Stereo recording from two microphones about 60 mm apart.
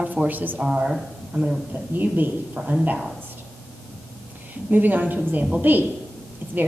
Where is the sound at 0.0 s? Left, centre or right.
Right.